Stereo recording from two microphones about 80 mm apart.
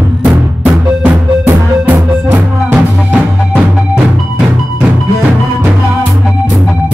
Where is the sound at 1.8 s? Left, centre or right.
Centre.